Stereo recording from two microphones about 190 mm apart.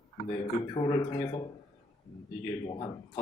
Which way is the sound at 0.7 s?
20° left (ahead or behind).